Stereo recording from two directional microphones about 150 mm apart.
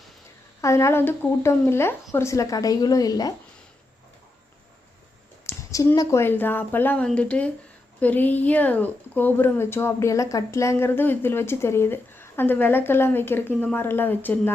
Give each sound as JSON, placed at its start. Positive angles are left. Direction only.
{"t": 0.6, "sound": "speech", "side_deg": 20}
{"t": 5.5, "sound": "speech", "side_deg": 20}